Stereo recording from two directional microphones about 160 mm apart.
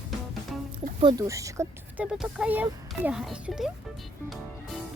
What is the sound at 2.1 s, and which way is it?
A child's voice, 5° right (ahead or behind).